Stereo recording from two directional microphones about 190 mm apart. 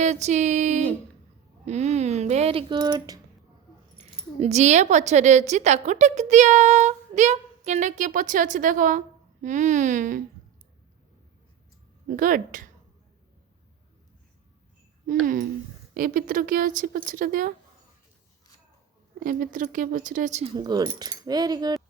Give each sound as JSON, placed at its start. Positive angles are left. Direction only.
{"t": 0.0, "sound": "speech", "side_deg": -35}
{"t": 3.9, "sound": "speech", "side_deg": -35}
{"t": 12.0, "sound": "speech", "side_deg": -45}
{"t": 15.0, "sound": "speech", "side_deg": -45}
{"t": 19.2, "sound": "speech", "side_deg": -45}
{"t": 20.6, "sound": "speech", "side_deg": -20}